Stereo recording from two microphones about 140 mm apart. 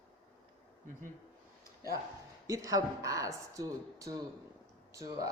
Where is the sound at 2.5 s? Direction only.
25° right (ahead or behind).